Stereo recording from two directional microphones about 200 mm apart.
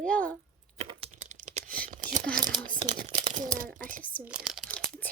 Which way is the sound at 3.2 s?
35° right (ahead or behind).